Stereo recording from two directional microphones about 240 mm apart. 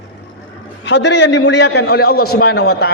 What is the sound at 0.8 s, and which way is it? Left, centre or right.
A man's voice, left.